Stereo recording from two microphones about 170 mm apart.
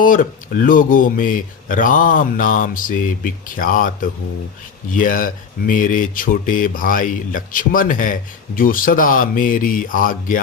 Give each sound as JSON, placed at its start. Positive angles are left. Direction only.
{"t": 0.0, "sound": "speech", "side_deg": 55}